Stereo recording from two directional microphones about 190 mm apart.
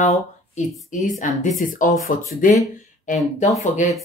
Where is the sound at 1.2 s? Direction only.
40° left (ahead or behind).